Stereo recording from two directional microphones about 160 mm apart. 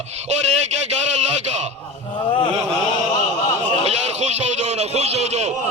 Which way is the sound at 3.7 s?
45° right (ahead or behind).